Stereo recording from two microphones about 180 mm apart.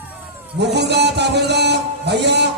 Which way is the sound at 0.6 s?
70° right (ahead or behind).